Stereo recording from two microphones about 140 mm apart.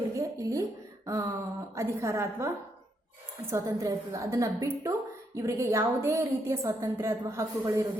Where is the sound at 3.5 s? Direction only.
25° right (ahead or behind).